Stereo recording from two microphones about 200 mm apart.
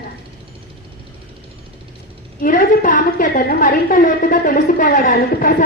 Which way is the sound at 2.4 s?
45° left (ahead or behind).